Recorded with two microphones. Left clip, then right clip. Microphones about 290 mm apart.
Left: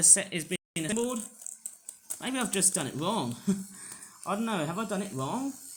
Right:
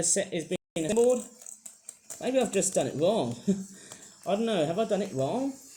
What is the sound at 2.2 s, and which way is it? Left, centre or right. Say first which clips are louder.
Speech: right 5 dB; left.